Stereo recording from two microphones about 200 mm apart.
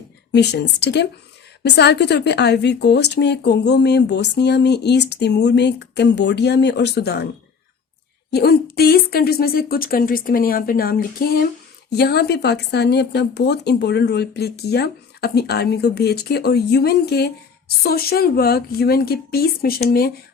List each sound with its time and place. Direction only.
0.3 s a woman's voice: 60° left (ahead or behind)
8.3 s speech: 55° left (ahead or behind)